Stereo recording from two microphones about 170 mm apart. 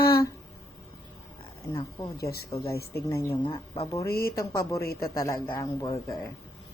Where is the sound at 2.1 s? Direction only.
65° left (ahead or behind).